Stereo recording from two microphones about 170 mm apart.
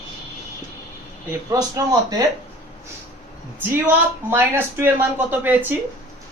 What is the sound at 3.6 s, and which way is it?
Speech, 10° right (ahead or behind).